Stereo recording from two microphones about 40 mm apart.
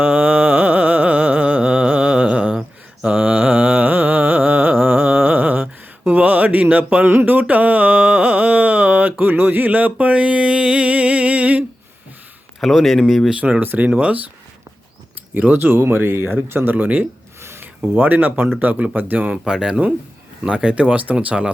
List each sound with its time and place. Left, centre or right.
0.0 s carnatic music: right
1.6 s music: right
2.1 s mantra: right
3.0 s carnatic music: right
6.1 s mantra: right
7.0 s a sound: right
12.5 s speech: centre
13.3 s speech: right
15.7 s speech: right
16.7 s speech: right
17.4 s a sound: right
17.9 s speech: right
19.5 s speech: centre; by 21.4 s right